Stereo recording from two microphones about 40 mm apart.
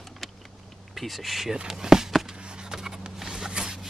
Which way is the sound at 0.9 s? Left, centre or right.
Centre.